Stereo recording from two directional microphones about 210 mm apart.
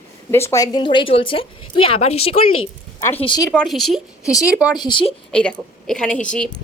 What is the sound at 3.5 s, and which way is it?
Speech, centre (ahead or behind).